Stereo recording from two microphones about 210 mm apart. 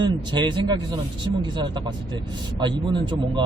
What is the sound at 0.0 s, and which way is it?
Speech, 20° right (ahead or behind).